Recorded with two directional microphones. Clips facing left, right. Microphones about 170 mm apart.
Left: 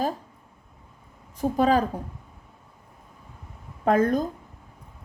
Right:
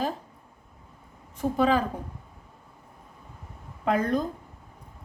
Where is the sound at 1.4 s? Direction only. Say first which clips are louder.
Left 2 dB; 40° left (ahead or behind).